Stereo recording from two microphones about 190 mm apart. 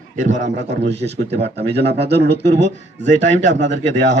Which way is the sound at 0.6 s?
65° right (ahead or behind).